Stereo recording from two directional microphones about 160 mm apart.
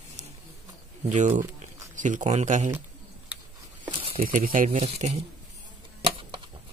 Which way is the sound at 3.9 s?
35° right (ahead or behind).